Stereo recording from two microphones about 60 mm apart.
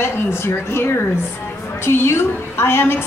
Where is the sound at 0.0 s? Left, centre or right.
Left.